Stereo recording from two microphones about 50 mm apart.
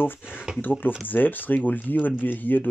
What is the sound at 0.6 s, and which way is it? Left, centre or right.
Speech, left.